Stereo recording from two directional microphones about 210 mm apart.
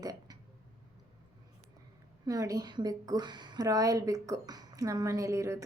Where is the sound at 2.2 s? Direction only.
15° right (ahead or behind).